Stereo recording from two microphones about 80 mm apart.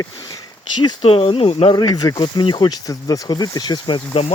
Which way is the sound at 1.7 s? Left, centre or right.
Left.